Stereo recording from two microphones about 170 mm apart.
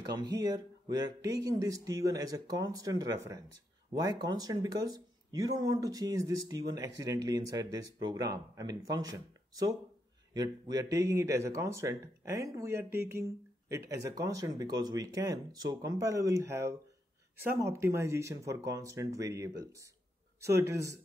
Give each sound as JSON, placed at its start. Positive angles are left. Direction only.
{"t": 0.1, "sound": "speech", "side_deg": -25}